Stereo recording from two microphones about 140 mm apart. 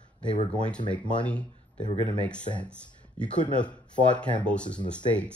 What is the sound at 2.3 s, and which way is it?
Speech, 10° left (ahead or behind).